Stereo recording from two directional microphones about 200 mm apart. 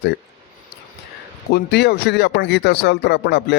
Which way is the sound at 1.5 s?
55° left (ahead or behind).